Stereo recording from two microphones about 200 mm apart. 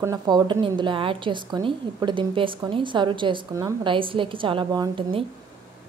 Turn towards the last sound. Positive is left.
turn(degrees=-25)  # may be behind; listen again after turning